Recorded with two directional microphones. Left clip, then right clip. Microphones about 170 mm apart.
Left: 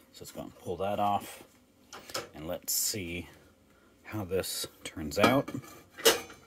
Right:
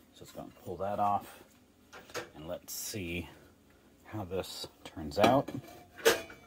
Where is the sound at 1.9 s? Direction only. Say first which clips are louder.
Left 3 dB; 50° left (ahead or behind).